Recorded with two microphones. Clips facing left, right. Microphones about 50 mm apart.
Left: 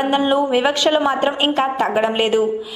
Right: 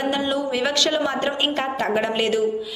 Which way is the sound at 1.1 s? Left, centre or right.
Centre.